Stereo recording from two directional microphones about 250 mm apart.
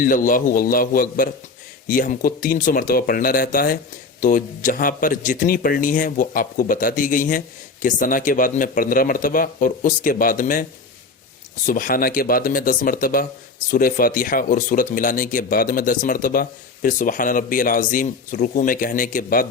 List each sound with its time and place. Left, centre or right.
0.0 s speech: left